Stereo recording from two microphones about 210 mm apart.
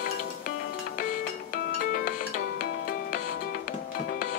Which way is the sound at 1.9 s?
40° left (ahead or behind).